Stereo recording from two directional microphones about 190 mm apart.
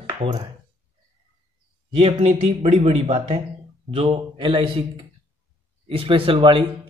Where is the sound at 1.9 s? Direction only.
30° right (ahead or behind).